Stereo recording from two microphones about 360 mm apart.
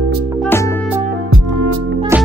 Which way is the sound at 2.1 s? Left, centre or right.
Centre.